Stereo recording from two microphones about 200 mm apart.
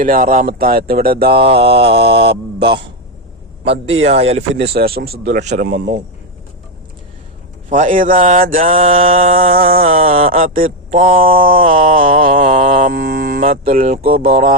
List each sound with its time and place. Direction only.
0.0 s speech: 45° right (ahead or behind)
1.5 s mantra: 55° right (ahead or behind)
3.6 s speech: 30° right (ahead or behind)
4.0 s mantra: 30° right (ahead or behind)
4.8 s speech: 45° right (ahead or behind)
5.5 s mantra: 40° right (ahead or behind)
7.7 s mantra: 40° right (ahead or behind)
9.4 s speech: 45° right (ahead or behind)
10.0 s speech: 30° right (ahead or behind)
10.5 s mantra: 40° right (ahead or behind)
11.7 s livestock: 40° right (ahead or behind)
13.7 s speech: 40° right (ahead or behind)